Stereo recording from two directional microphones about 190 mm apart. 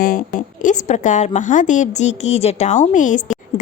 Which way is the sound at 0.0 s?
45° left (ahead or behind).